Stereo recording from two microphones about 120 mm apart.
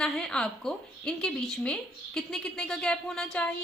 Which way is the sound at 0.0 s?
5° left (ahead or behind).